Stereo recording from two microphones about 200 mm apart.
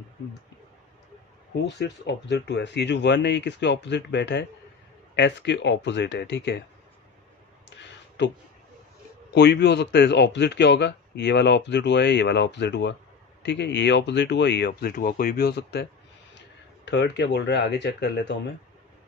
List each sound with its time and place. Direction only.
1.7 s speech: 60° left (ahead or behind)
8.2 s speech: 60° left (ahead or behind)